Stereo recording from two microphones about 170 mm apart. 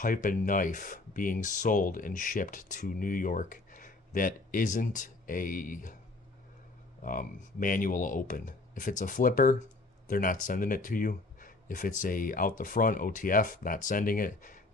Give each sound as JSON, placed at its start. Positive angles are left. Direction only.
{"t": 0.0, "sound": "speech", "side_deg": 50}
{"t": 7.0, "sound": "speech", "side_deg": 55}